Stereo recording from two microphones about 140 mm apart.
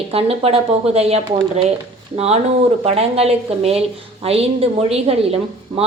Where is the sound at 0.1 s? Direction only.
45° right (ahead or behind).